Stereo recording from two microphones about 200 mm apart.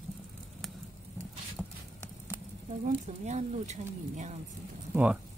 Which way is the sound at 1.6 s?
10° left (ahead or behind).